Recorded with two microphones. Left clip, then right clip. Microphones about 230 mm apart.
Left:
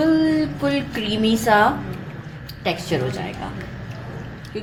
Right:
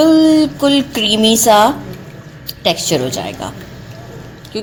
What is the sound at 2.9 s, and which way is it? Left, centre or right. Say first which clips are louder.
Speech: right 7 dB; right.